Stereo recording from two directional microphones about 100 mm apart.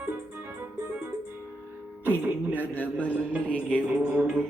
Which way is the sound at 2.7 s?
15° left (ahead or behind).